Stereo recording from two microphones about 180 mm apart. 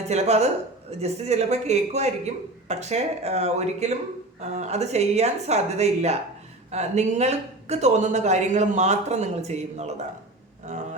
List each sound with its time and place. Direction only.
0.1 s speech: 35° right (ahead or behind)